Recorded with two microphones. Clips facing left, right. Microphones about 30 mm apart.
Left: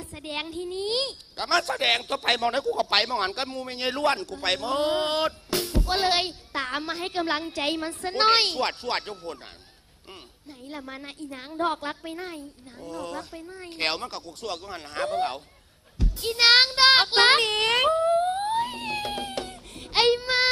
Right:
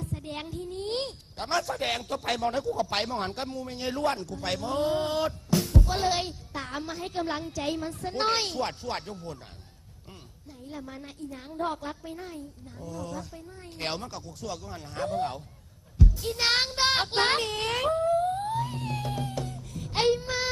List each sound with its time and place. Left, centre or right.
0.0 s a woman's voice: left
10.7 s a woman's voice: left
16.0 s child singing: left